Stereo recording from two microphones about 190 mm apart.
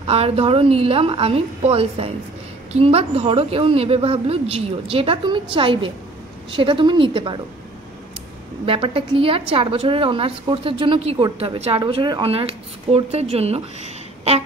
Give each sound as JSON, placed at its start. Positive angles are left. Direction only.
{"t": 0.0, "sound": "a woman's voice", "side_deg": -30}
{"t": 8.6, "sound": "a woman's voice", "side_deg": -25}